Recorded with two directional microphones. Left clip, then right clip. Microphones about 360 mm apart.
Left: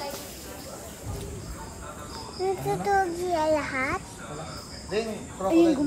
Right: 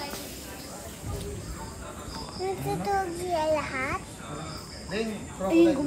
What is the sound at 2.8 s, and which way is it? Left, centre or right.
A child's voice, centre.